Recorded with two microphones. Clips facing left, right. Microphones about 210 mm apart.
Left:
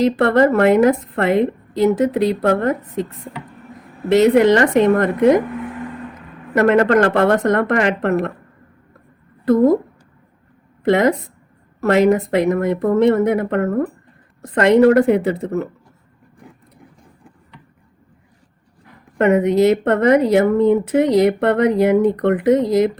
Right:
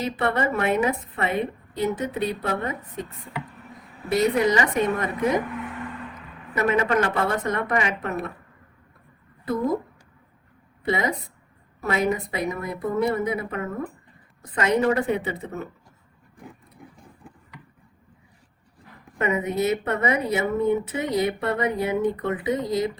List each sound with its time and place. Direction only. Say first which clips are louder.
0.0 s a woman's voice: left 11 dB; 90° left
4.1 s a woman's voice: left 9 dB; 85° left
6.5 s a woman's voice: left 9 dB; 75° left (ahead or behind)
10.8 s a woman's voice: left 10 dB; 90° left
19.2 s a woman's voice: left 10 dB; 80° left